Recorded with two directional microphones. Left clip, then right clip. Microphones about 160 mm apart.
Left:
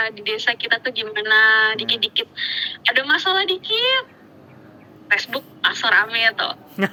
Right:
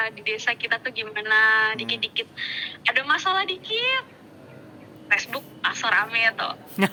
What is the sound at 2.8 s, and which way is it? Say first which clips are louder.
Speech: left 4 dB; 50° left (ahead or behind).